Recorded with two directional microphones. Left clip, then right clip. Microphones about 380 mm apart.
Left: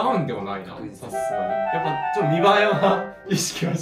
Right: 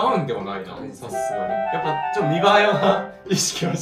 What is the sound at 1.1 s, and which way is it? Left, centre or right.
Speech, centre.